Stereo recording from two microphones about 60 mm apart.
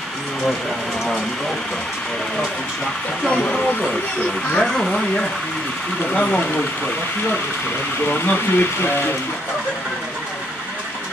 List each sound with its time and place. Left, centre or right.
3.3 s speech: centre
8.1 s speech: left